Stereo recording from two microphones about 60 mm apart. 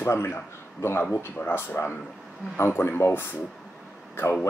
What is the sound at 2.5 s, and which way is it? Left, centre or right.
Speech, left.